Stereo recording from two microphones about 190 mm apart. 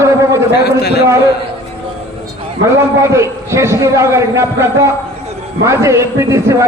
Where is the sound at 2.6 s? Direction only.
15° right (ahead or behind).